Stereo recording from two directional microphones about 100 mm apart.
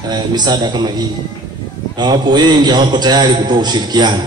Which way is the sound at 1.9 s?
45° right (ahead or behind).